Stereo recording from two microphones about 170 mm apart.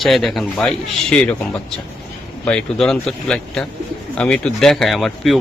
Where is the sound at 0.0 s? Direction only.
Centre (ahead or behind).